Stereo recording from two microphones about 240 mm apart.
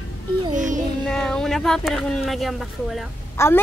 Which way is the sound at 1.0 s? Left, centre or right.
Centre.